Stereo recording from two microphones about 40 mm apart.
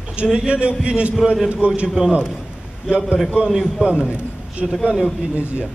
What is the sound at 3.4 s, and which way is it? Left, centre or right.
Speech, centre.